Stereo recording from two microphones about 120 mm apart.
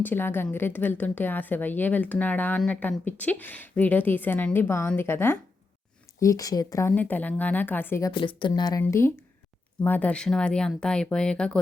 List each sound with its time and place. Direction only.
0.0 s a woman's voice: 15° left (ahead or behind)
6.9 s a woman's voice: 15° left (ahead or behind)
8.1 s speech: 45° left (ahead or behind)
8.8 s a woman's voice: 20° left (ahead or behind)